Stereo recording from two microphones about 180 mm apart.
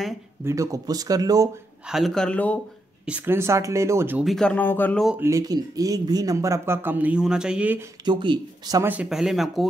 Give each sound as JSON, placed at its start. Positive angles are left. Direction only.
{"t": 0.5, "sound": "speech", "side_deg": -20}
{"t": 1.9, "sound": "speech", "side_deg": 0}
{"t": 3.1, "sound": "speech", "side_deg": -10}
{"t": 4.2, "sound": "speech", "side_deg": 0}
{"t": 5.0, "sound": "speech", "side_deg": -10}
{"t": 8.0, "sound": "speech", "side_deg": -25}
{"t": 8.9, "sound": "speech", "side_deg": -5}